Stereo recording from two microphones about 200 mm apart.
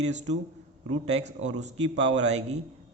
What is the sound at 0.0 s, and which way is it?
Speech, 35° right (ahead or behind).